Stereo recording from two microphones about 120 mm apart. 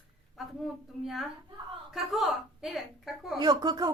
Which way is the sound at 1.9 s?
Centre (ahead or behind).